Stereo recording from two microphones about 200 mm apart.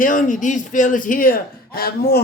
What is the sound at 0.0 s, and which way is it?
A man's voice, 40° left (ahead or behind).